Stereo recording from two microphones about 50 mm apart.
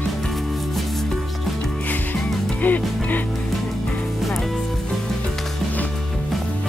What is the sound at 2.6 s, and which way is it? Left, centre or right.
Music, left.